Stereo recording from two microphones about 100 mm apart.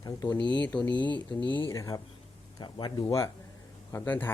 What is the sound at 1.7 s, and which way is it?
Speech, 35° left (ahead or behind).